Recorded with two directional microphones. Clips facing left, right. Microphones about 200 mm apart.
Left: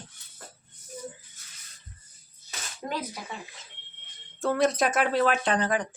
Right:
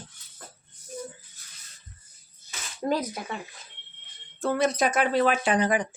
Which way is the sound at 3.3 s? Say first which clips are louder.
Right 4 dB; 65° right (ahead or behind).